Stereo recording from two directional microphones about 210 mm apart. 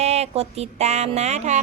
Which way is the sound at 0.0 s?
30° right (ahead or behind).